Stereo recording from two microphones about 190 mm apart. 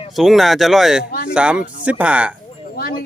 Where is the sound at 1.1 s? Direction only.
55° left (ahead or behind).